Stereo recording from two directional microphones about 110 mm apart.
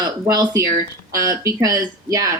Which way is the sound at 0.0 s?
35° right (ahead or behind).